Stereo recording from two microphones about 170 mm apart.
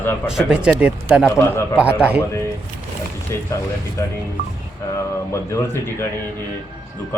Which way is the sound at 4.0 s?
15° left (ahead or behind).